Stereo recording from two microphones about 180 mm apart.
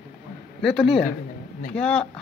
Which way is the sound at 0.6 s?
Centre (ahead or behind).